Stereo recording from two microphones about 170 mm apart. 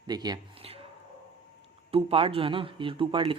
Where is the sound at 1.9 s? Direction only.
35° right (ahead or behind).